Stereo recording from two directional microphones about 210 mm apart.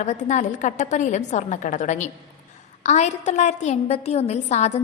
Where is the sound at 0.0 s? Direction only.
35° left (ahead or behind).